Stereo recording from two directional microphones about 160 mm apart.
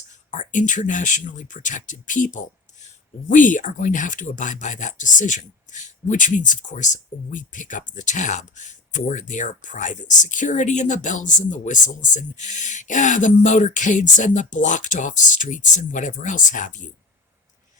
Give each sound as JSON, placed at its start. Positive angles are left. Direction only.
{"t": 0.3, "sound": "speech", "side_deg": 50}